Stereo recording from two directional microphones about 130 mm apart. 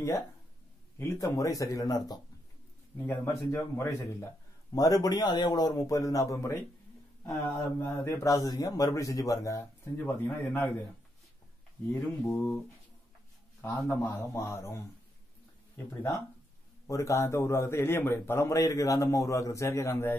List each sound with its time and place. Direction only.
0.9 s a man's voice: 20° left (ahead or behind)
11.9 s a man's voice: 20° left (ahead or behind)
13.6 s a man's voice: 20° left (ahead or behind)